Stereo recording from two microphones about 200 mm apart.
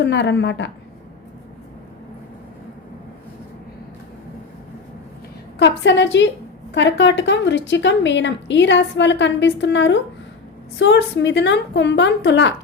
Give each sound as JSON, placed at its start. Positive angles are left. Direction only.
{"t": 0.0, "sound": "a woman's voice", "side_deg": 60}
{"t": 5.5, "sound": "a woman's voice", "side_deg": 60}